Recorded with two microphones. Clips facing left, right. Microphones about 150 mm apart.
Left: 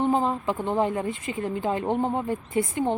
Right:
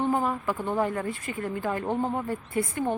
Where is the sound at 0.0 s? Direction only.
20° left (ahead or behind).